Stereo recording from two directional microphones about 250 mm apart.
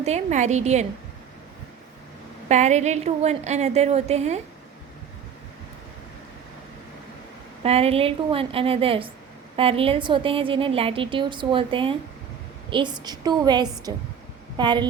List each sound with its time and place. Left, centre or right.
0.0 s a woman's voice: right
2.5 s a woman's voice: right
7.6 s a woman's voice: right